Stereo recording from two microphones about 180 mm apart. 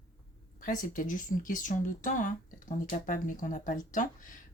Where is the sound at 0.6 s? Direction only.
45° left (ahead or behind).